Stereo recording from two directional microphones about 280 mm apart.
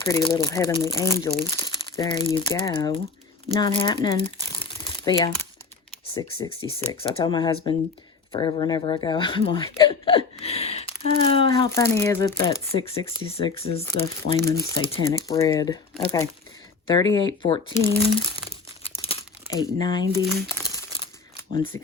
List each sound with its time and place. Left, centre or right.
0.0 s speech: centre
19.0 s crumpling: centre